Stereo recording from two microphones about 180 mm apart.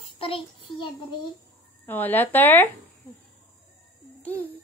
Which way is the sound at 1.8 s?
10° left (ahead or behind).